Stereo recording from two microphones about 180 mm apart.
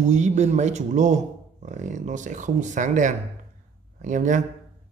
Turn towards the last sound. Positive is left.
turn(degrees=-45)  # may be behind; listen again after turning